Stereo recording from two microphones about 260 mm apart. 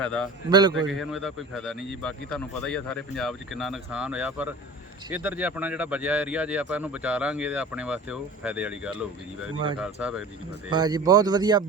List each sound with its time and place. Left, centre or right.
0.0 s speech: centre
10.7 s a man's voice: centre